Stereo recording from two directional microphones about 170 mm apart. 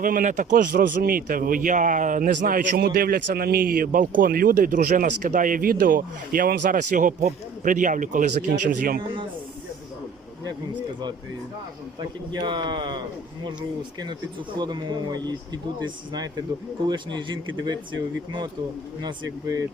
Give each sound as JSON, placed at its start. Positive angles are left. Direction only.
{"t": 0.0, "sound": "speech", "side_deg": -50}
{"t": 11.9, "sound": "speech", "side_deg": -25}
{"t": 14.6, "sound": "speech", "side_deg": -25}
{"t": 19.0, "sound": "speech", "side_deg": -20}